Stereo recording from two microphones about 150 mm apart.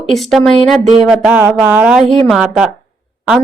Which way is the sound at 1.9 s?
Centre (ahead or behind).